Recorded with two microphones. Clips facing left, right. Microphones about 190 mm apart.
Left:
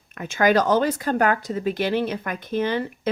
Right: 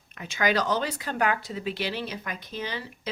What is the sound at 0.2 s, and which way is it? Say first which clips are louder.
Speech: left 7 dB; 50° left (ahead or behind).